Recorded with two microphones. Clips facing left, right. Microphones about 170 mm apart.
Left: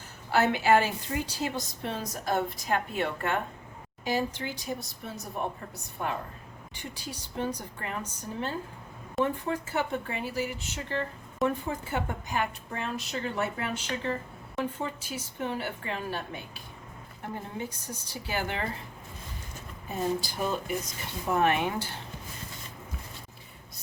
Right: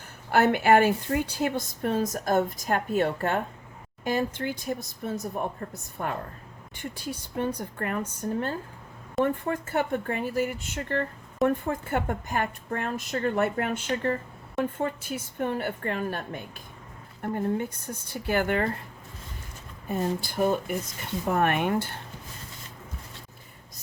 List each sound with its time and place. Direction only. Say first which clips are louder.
0.3 s a woman's voice: right 3 dB; 55° right (ahead or behind)
4.0 s a woman's voice: right 3 dB; 55° right (ahead or behind)
19.9 s a woman's voice: right 2 dB; 55° right (ahead or behind)